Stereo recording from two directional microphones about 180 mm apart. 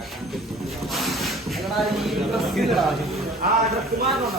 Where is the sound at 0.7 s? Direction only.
Centre (ahead or behind).